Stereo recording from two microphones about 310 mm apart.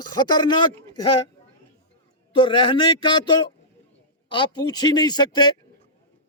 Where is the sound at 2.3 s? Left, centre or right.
Centre.